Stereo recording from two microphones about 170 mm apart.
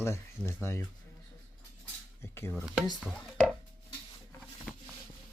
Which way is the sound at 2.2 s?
15° left (ahead or behind).